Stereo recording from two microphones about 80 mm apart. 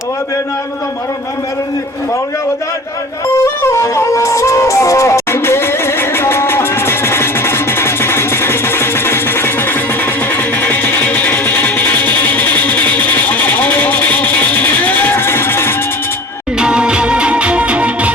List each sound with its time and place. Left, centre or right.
3.4 s music: left
16.6 s music: centre